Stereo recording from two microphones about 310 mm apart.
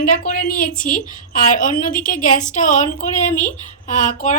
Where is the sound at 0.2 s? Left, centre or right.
Left.